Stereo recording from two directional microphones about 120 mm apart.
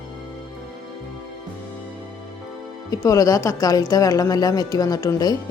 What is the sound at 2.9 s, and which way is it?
Speech, 30° left (ahead or behind).